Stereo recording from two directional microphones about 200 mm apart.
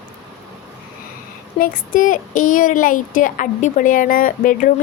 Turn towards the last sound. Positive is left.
turn(degrees=45)  # may be behind; listen again after turning